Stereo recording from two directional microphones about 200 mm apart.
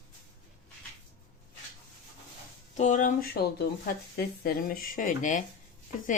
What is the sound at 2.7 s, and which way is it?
A woman's voice, 40° left (ahead or behind).